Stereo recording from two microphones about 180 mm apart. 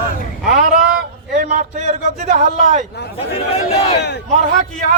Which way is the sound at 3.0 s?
65° left (ahead or behind).